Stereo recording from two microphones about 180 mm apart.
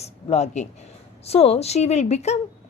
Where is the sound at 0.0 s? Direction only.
35° left (ahead or behind).